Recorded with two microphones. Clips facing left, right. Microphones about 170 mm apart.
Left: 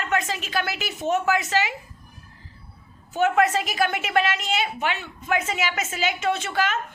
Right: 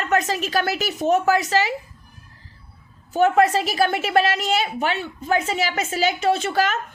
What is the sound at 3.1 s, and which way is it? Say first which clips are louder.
A woman's voice: right 4 dB; 35° right (ahead or behind).